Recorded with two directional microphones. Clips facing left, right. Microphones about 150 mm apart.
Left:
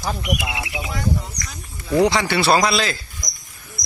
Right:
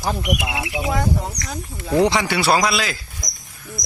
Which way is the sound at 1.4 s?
75° right (ahead or behind).